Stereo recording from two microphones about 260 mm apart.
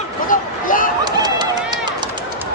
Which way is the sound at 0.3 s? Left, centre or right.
Left.